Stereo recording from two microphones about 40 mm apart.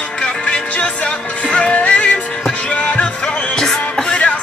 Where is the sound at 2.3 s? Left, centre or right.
Left.